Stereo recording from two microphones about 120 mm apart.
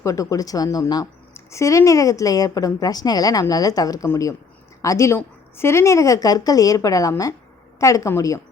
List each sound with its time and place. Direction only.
0.0 s a woman's voice: 30° left (ahead or behind)